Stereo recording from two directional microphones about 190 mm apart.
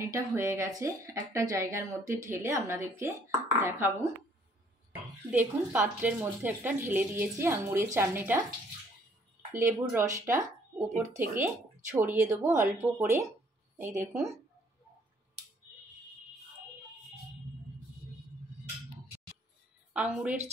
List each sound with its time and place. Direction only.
0.0 s speech: 15° right (ahead or behind)
9.5 s speech: 15° right (ahead or behind)
19.9 s a woman's voice: 5° right (ahead or behind)